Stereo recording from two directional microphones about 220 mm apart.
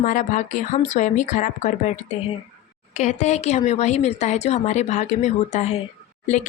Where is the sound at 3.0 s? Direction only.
30° left (ahead or behind).